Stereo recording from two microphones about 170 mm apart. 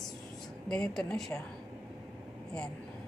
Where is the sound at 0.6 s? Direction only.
5° left (ahead or behind).